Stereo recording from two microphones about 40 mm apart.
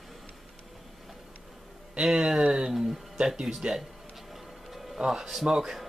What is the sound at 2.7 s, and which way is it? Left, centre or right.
Speech, centre.